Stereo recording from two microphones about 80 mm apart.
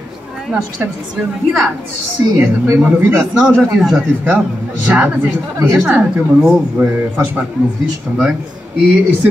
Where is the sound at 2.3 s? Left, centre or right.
Right.